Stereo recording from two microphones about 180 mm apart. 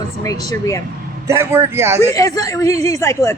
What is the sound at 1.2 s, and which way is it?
Speech, 15° right (ahead or behind).